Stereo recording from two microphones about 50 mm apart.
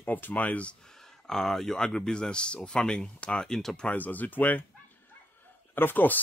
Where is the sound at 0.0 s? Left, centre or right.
Left.